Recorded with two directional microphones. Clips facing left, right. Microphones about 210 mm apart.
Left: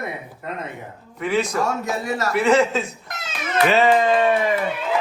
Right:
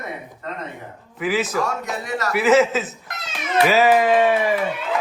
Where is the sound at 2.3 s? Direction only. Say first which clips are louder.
Right 2 dB; 5° right (ahead or behind).